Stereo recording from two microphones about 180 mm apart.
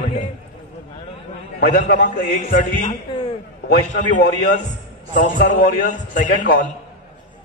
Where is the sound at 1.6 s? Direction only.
55° left (ahead or behind).